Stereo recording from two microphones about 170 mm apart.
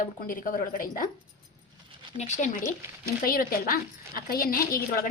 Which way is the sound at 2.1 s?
45° left (ahead or behind).